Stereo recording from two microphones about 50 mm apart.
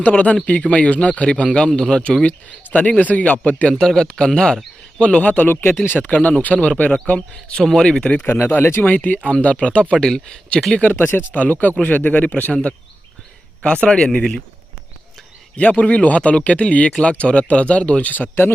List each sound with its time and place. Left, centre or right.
0.0 s speech: left
2.2 s a man's voice: left
3.8 s speech: centre
5.2 s speech: left
5.5 s speech: left
6.1 s speech: left
8.3 s speech: left
8.9 s a man's voice: left
9.9 s speech: centre
10.9 s a man's voice: left
13.7 s speech: centre
15.5 s speech: left
18.1 s a man's voice: left